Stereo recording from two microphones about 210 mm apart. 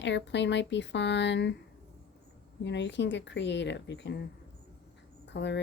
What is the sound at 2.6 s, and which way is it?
Speech, 55° left (ahead or behind).